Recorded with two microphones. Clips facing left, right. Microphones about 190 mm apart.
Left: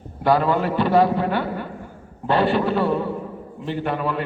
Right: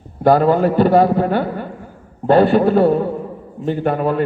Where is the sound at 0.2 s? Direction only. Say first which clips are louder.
Right 6 dB; 45° right (ahead or behind).